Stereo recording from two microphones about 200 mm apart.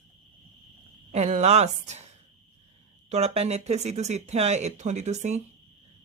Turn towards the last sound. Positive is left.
turn(degrees=-35)  # may be behind; listen again after turning